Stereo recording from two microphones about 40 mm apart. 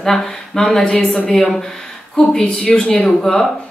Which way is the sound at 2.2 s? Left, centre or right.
Left.